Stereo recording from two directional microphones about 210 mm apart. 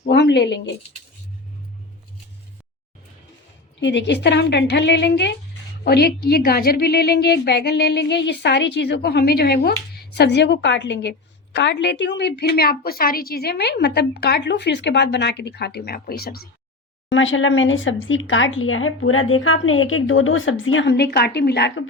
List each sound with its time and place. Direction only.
0.0 s a sound: 55° left (ahead or behind)
3.8 s a woman's voice: 60° left (ahead or behind)
17.1 s speech: 65° left (ahead or behind)